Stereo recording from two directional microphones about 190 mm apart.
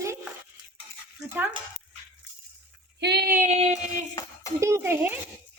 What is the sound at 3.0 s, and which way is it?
Female singing, 60° right (ahead or behind).